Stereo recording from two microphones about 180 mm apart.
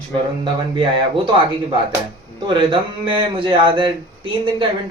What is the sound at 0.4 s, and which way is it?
Speech, 30° right (ahead or behind).